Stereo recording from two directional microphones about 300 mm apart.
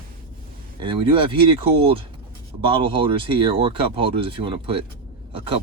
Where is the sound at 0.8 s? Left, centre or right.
Centre.